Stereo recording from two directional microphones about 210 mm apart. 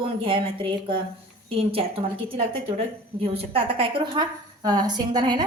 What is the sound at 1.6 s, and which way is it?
Speech, 25° right (ahead or behind).